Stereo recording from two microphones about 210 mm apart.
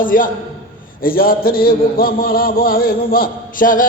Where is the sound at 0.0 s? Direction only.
40° left (ahead or behind).